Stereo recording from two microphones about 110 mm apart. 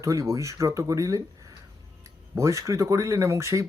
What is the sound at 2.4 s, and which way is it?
Speech, 25° right (ahead or behind).